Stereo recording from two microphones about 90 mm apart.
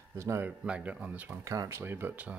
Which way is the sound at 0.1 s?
30° right (ahead or behind).